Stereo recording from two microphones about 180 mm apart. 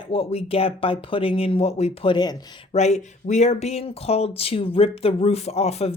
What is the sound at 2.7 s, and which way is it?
Speech, 40° left (ahead or behind).